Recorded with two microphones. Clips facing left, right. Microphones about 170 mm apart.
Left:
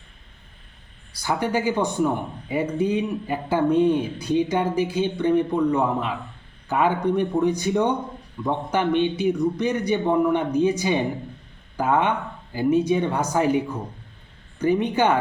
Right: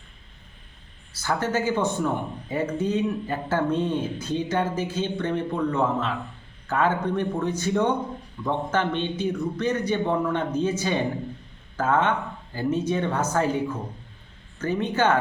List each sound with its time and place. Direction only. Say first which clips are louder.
1.1 s speech: left 2 dB; 15° left (ahead or behind)
14.6 s speech: left 3 dB; 15° left (ahead or behind)